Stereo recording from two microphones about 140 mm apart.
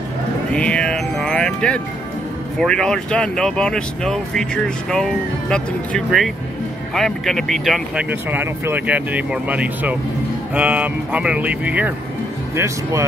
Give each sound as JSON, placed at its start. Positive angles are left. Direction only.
{"t": 0.5, "sound": "music", "side_deg": 5}
{"t": 2.6, "sound": "speech", "side_deg": 5}